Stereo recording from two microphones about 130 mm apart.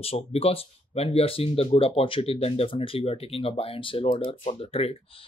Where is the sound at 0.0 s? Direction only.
50° left (ahead or behind).